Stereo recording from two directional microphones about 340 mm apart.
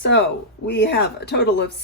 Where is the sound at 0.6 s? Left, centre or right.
Left.